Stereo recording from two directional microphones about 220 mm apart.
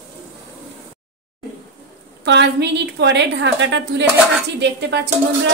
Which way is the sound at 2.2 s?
50° right (ahead or behind).